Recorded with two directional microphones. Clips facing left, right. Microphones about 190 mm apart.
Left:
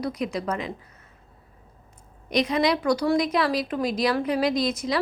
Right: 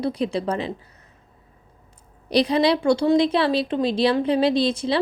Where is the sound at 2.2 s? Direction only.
35° right (ahead or behind).